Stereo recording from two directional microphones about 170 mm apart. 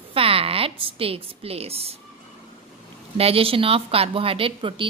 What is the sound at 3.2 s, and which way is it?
A woman's voice, 35° right (ahead or behind).